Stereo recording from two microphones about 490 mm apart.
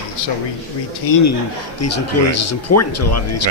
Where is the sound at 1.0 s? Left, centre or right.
Left.